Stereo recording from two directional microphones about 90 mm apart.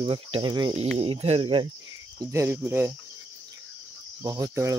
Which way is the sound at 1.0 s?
75° right (ahead or behind).